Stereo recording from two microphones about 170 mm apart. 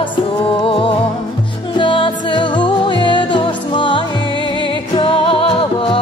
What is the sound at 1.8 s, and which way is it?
Music, 30° left (ahead or behind).